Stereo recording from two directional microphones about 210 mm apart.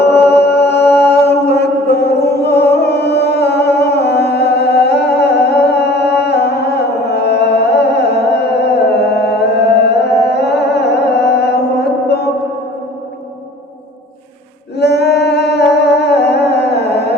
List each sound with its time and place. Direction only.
0.3 s chant: 55° left (ahead or behind)
12.0 s music: 50° left (ahead or behind)
14.8 s humming: 50° left (ahead or behind)